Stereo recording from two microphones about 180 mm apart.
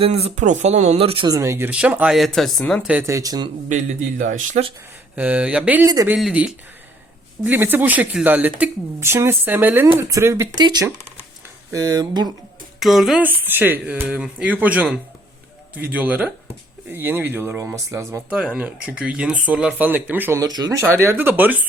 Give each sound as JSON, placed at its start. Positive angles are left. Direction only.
{"t": 0.0, "sound": "speech", "side_deg": -35}
{"t": 1.4, "sound": "speech", "side_deg": -15}
{"t": 2.9, "sound": "speech", "side_deg": -15}
{"t": 3.7, "sound": "speech", "side_deg": -45}
{"t": 5.1, "sound": "speech", "side_deg": -10}
{"t": 12.8, "sound": "speech", "side_deg": 0}